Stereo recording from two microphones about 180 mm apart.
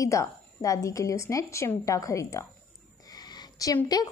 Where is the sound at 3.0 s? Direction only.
20° left (ahead or behind).